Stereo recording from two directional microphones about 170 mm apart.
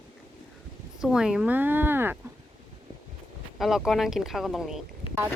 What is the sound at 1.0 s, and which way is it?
Speech, 5° right (ahead or behind).